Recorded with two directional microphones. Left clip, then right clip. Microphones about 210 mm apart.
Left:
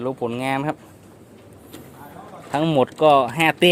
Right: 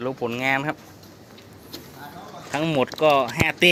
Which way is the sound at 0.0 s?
20° left (ahead or behind).